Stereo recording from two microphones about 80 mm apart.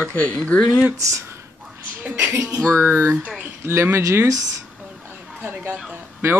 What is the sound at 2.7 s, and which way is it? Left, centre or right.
Speech, right.